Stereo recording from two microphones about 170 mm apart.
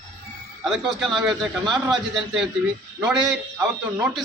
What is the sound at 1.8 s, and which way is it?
Speech, 25° right (ahead or behind).